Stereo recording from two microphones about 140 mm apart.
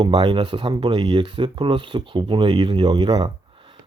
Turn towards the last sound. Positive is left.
turn(degrees=-35)  # may be behind; listen again after turning